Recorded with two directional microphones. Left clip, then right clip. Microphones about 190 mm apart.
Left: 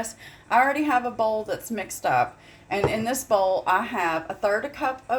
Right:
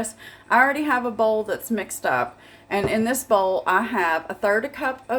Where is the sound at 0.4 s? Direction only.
15° right (ahead or behind).